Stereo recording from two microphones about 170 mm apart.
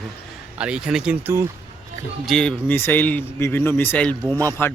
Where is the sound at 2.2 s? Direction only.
5° left (ahead or behind).